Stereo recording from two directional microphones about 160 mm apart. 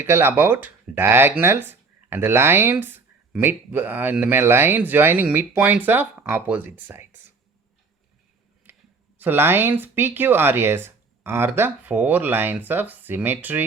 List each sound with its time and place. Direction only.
0.0 s speech: 15° right (ahead or behind)
9.1 s speech: 15° right (ahead or behind)